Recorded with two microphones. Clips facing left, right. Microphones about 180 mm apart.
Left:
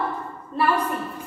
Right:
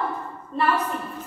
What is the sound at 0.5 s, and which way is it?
Speech, 5° left (ahead or behind).